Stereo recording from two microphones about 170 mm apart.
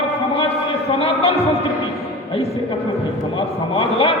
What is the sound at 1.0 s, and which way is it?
Music, 35° left (ahead or behind).